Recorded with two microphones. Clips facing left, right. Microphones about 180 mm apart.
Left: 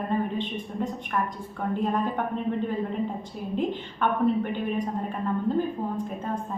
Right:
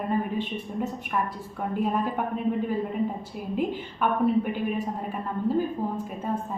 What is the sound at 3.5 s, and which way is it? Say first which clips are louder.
A woman's voice: even; 10° right (ahead or behind).